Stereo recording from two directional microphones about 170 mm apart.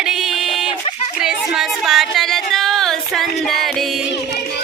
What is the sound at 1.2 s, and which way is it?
Music, centre (ahead or behind).